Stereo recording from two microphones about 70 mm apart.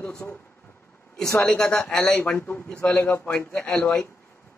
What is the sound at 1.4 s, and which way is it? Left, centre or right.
Speech, centre.